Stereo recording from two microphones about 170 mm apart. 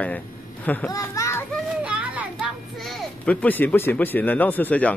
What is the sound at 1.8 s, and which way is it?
A child's voice, 10° right (ahead or behind).